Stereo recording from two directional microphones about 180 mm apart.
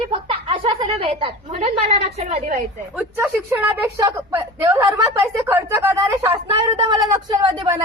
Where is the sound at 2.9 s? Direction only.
10° right (ahead or behind).